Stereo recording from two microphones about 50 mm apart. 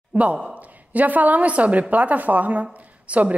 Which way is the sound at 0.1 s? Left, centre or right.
Centre.